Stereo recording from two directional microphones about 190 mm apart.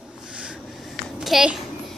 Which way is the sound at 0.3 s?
5° right (ahead or behind).